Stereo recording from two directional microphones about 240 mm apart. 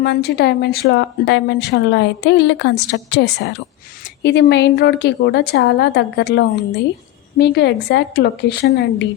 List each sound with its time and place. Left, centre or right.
0.0 s a woman's voice: left